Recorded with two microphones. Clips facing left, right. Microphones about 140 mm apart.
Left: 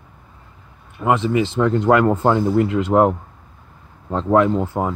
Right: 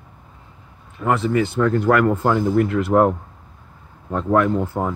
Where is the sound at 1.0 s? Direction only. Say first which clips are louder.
Left 1 dB; 15° left (ahead or behind).